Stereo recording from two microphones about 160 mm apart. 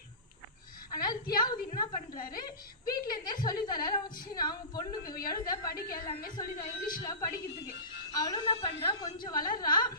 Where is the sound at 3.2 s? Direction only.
25° left (ahead or behind).